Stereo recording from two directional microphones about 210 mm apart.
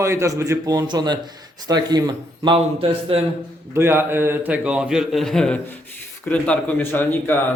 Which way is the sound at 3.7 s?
10° right (ahead or behind).